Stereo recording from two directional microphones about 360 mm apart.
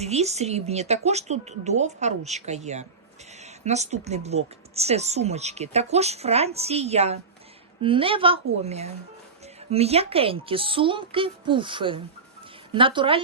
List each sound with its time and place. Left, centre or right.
0.0 s a woman's voice: centre